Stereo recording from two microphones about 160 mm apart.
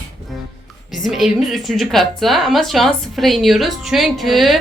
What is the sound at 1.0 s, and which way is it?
A woman's voice, centre (ahead or behind).